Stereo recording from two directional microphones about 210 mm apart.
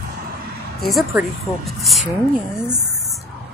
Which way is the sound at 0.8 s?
Centre (ahead or behind).